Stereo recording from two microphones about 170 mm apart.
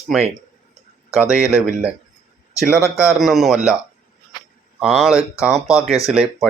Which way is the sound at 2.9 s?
5° right (ahead or behind).